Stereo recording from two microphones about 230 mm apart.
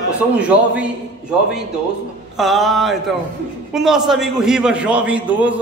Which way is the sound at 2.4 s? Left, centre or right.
Centre.